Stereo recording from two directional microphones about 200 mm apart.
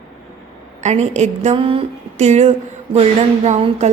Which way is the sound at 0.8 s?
35° right (ahead or behind).